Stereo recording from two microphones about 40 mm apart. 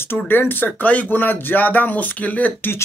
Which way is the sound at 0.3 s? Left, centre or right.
Left.